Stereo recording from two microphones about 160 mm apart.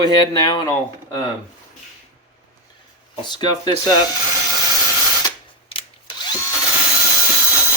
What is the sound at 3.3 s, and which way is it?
Speech, 25° left (ahead or behind).